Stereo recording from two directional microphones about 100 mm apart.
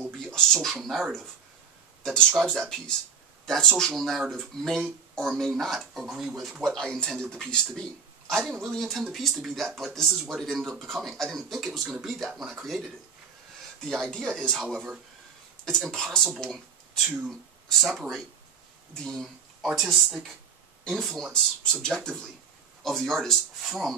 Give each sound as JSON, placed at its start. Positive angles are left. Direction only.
{"t": 0.0, "sound": "speech", "side_deg": 5}
{"t": 2.4, "sound": "speech", "side_deg": -10}
{"t": 3.4, "sound": "speech", "side_deg": 5}
{"t": 13.8, "sound": "speech", "side_deg": 5}
{"t": 17.0, "sound": "speech", "side_deg": -20}
{"t": 17.3, "sound": "speech", "side_deg": 0}